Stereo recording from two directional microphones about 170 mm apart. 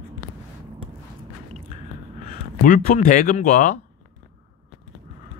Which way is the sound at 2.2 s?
55° left (ahead or behind).